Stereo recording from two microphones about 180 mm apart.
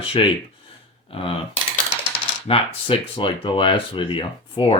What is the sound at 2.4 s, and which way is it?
Speech, 30° left (ahead or behind).